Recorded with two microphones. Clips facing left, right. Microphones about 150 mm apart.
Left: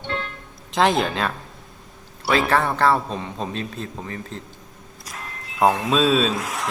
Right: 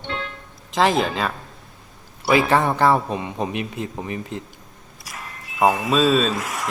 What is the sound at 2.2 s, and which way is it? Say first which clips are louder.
A man's voice: right 2 dB; 15° right (ahead or behind).